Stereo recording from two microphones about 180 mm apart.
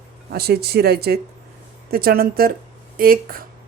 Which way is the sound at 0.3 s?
60° right (ahead or behind).